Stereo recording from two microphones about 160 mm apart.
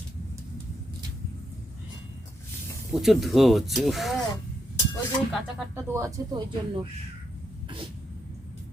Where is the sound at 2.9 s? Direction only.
Centre (ahead or behind).